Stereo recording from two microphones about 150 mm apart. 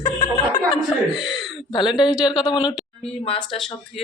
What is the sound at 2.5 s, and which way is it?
Speech, 30° left (ahead or behind).